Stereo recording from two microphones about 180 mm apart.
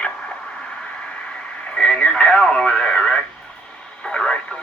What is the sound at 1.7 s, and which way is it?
Radio, 5° left (ahead or behind).